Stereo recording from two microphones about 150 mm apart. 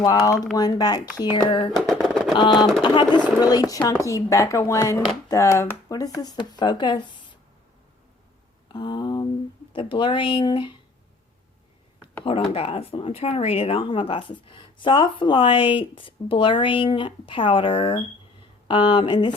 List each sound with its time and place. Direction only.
0.0 s speech: 25° left (ahead or behind)
1.7 s a sound: centre (ahead or behind)
2.3 s speech: 30° left (ahead or behind)
2.6 s speech: centre (ahead or behind)
2.8 s speech: 30° left (ahead or behind)
8.7 s speech: 30° left (ahead or behind)
12.2 s speech: 35° left (ahead or behind)